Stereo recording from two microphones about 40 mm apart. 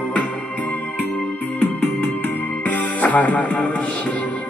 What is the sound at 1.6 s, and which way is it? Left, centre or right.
Music, left.